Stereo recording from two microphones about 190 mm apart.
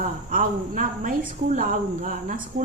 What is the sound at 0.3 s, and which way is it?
Speech, 45° right (ahead or behind).